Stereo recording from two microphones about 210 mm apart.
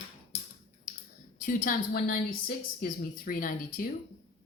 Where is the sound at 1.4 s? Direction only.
40° left (ahead or behind).